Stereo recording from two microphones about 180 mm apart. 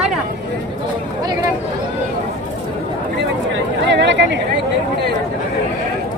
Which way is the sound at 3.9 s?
75° right (ahead or behind).